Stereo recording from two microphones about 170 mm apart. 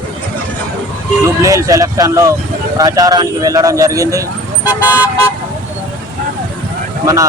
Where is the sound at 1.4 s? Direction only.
20° right (ahead or behind).